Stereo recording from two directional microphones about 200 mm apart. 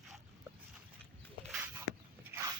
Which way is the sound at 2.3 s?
15° right (ahead or behind).